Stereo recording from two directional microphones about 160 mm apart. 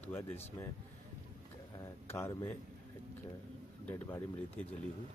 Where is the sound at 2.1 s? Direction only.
20° left (ahead or behind).